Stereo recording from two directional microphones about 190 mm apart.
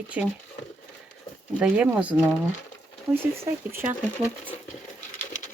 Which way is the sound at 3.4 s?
15° right (ahead or behind).